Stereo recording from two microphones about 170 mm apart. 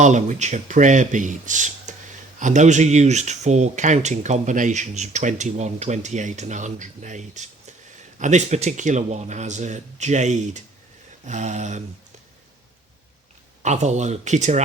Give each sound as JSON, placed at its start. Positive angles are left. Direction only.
{"t": 0.0, "sound": "speech", "side_deg": -45}
{"t": 13.6, "sound": "speech", "side_deg": -45}